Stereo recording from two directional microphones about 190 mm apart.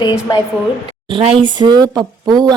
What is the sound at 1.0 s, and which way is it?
Speech, 25° right (ahead or behind).